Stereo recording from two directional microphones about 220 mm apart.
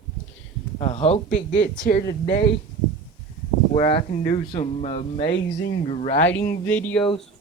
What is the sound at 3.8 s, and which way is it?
Speech, 30° left (ahead or behind).